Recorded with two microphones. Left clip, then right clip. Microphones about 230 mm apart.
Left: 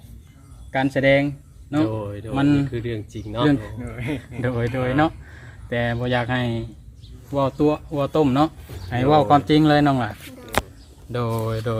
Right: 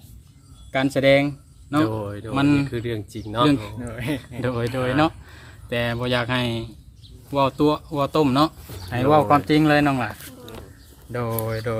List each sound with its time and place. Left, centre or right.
0.7 s speech: centre
1.8 s speech: right
2.3 s speech: centre
2.6 s speech: right
3.4 s speech: centre
3.8 s speech: right
4.4 s speech: centre
11.3 s speech: centre